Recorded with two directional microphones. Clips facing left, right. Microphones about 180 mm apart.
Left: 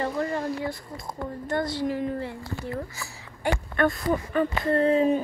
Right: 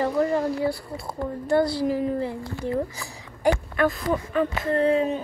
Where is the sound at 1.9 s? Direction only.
30° right (ahead or behind).